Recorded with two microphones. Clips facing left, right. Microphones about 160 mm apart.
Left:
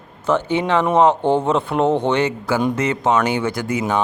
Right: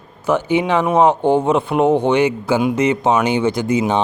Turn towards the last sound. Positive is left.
turn(degrees=-20)  # may be behind; listen again after turning